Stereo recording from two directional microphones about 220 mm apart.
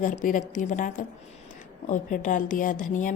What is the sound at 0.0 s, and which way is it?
A woman's voice, 35° left (ahead or behind).